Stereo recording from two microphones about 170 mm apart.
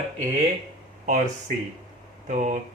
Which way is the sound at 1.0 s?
45° right (ahead or behind).